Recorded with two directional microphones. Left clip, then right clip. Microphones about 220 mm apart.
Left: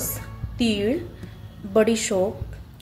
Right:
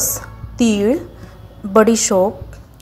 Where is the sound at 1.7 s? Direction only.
10° right (ahead or behind).